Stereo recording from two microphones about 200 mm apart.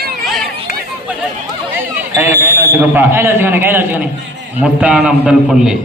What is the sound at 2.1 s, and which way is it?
A man's voice, 10° right (ahead or behind).